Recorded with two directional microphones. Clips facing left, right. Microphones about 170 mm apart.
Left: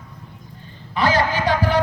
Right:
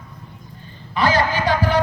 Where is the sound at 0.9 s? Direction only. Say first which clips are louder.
Even; 20° left (ahead or behind).